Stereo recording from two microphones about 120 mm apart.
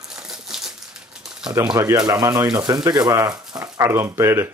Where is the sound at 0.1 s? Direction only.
5° right (ahead or behind).